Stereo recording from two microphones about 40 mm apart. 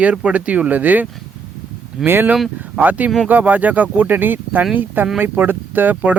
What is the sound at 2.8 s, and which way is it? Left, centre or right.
Speech, right.